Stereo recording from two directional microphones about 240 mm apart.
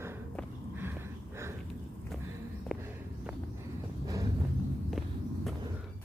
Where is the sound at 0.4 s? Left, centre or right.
Centre.